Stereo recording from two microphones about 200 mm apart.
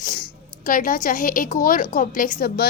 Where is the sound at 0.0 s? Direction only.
45° left (ahead or behind).